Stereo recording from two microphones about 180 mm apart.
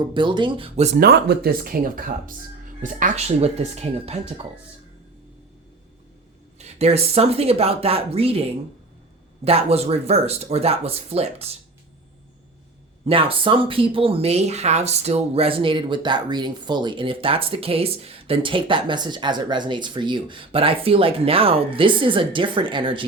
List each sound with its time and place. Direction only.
0.0 s speech: 25° right (ahead or behind)
0.9 s speech: 60° right (ahead or behind); by 4.4 s 35° right (ahead or behind)
6.6 s speech: 35° right (ahead or behind)
13.1 s speech: 30° right (ahead or behind)